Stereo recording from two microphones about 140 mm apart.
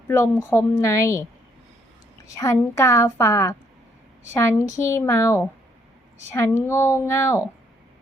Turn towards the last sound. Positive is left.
turn(degrees=20)  # may be behind; listen again after turning